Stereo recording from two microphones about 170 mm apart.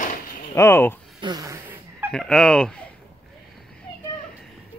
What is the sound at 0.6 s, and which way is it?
Speech, 15° left (ahead or behind).